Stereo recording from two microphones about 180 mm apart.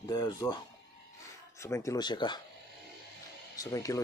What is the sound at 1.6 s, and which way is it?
Speech, 15° left (ahead or behind).